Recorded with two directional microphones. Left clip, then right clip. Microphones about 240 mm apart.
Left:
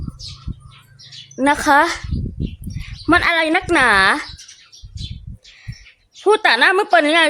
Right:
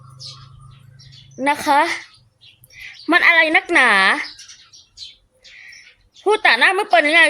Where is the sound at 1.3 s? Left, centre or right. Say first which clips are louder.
Left 2 dB; left.